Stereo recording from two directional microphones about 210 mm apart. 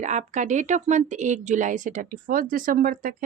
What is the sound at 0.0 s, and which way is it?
Speech, 35° right (ahead or behind).